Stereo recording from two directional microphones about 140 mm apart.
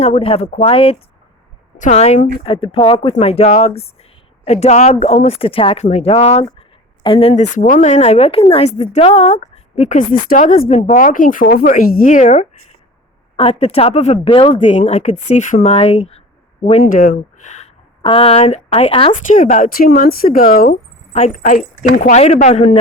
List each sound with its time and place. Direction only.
0.0 s speech: 45° left (ahead or behind)
1.8 s speech: 55° left (ahead or behind)
2.4 s speech: 40° left (ahead or behind)
13.3 s speech: 45° left (ahead or behind)
14.3 s speech: 40° left (ahead or behind)
14.6 s speech: 55° left (ahead or behind)
16.8 s speech: 80° left
18.0 s speech: 40° left (ahead or behind)
19.4 s speech: 70° left (ahead or behind); by 20.7 s 90° left
21.1 s speech: 55° left (ahead or behind)
22.1 s speech: 50° left (ahead or behind)